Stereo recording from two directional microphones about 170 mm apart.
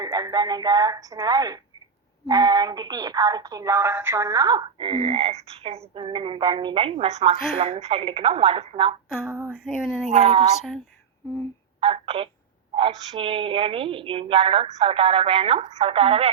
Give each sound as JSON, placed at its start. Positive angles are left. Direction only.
{"t": 0.0, "sound": "a woman's voice", "side_deg": -20}
{"t": 9.3, "sound": "speech", "side_deg": -15}
{"t": 9.6, "sound": "speech", "side_deg": 0}
{"t": 10.1, "sound": "speech", "side_deg": -35}
{"t": 11.8, "sound": "speech", "side_deg": -30}